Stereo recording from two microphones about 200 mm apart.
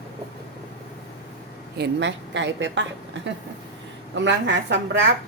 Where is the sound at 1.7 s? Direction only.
60° right (ahead or behind).